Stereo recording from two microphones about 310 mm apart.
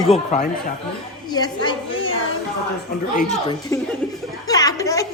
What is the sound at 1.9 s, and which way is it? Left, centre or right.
Music, left.